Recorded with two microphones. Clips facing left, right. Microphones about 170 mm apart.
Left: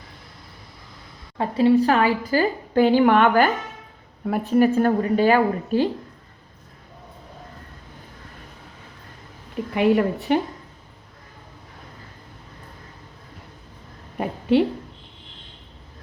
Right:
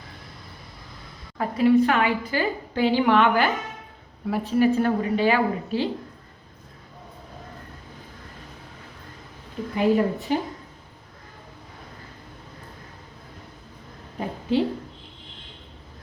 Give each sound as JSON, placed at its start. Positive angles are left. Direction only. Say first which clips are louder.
{"t": 1.4, "sound": "a woman's voice", "louder": "left 1 dB", "side_deg": 30}
{"t": 9.7, "sound": "a woman's voice", "louder": "left 2 dB", "side_deg": 70}
{"t": 14.5, "sound": "a woman's voice", "louder": "left 5 dB", "side_deg": 65}